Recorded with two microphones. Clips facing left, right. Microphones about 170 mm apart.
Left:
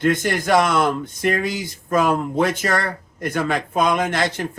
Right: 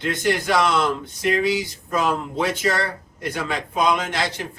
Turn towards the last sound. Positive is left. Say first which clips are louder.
# left 4 dB
turn(degrees=50)  # may be behind; listen again after turning